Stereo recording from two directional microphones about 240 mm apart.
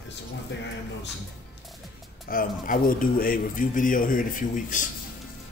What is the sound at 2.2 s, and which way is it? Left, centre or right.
Speech, left.